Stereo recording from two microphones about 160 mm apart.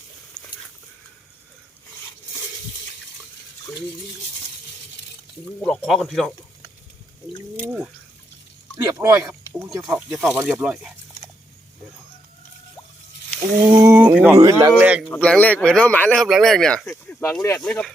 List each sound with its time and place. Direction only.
0.4 s a sound: 25° left (ahead or behind)
5.5 s speech: 5° left (ahead or behind)
7.6 s speech: 10° right (ahead or behind)
8.7 s speech: 20° right (ahead or behind)
9.8 s speech: centre (ahead or behind)
13.7 s speech: 15° right (ahead or behind)
15.1 s speech: 10° left (ahead or behind)
17.6 s speech: 5° left (ahead or behind)